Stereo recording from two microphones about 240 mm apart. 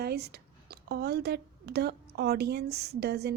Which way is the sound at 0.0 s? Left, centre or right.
Right.